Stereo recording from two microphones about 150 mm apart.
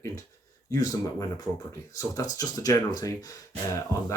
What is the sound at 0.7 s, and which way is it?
Speech, 25° left (ahead or behind).